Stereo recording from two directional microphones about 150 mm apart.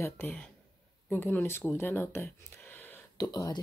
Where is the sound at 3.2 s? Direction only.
25° left (ahead or behind).